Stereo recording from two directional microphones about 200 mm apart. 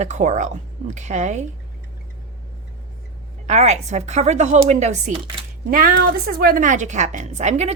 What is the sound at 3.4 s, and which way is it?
A woman's voice, 35° right (ahead or behind).